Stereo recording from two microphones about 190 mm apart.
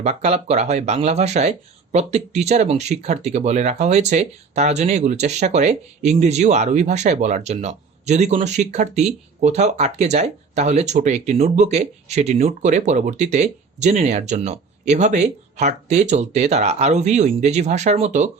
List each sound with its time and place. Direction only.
0.0 s speech: 35° right (ahead or behind)